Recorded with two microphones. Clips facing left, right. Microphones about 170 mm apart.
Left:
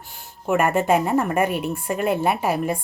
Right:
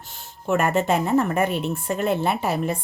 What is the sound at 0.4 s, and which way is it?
A woman's voice, 10° left (ahead or behind).